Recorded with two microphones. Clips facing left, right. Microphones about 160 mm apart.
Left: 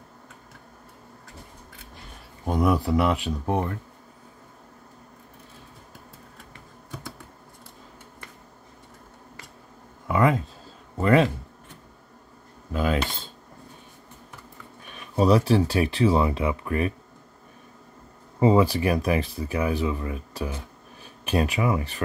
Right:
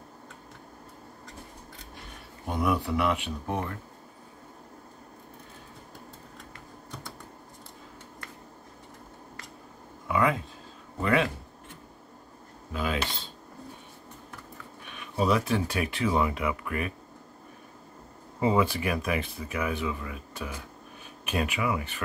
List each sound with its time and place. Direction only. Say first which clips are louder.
2.4 s speech: left 5 dB; 40° left (ahead or behind)
11.0 s speech: left 6 dB; 40° left (ahead or behind)
12.7 s cutlery: left 5 dB; 50° left (ahead or behind)
15.0 s speech: left 6 dB; 35° left (ahead or behind)
18.4 s speech: left 6 dB; 35° left (ahead or behind)